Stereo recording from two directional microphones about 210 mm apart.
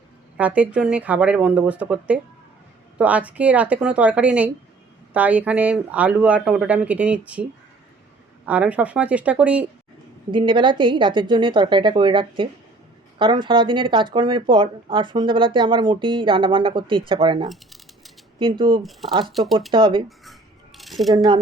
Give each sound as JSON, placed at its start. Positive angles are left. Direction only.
{"t": 0.3, "sound": "speech", "side_deg": -5}
{"t": 8.4, "sound": "speech", "side_deg": -5}
{"t": 10.3, "sound": "speech", "side_deg": -25}
{"t": 17.5, "sound": "typing", "side_deg": 0}
{"t": 18.3, "sound": "speech", "side_deg": -25}
{"t": 18.8, "sound": "speech", "side_deg": 0}
{"t": 19.7, "sound": "speech", "side_deg": -25}
{"t": 20.7, "sound": "a sound", "side_deg": 0}